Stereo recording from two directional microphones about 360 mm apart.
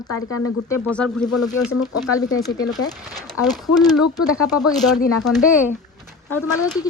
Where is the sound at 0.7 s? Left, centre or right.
Centre.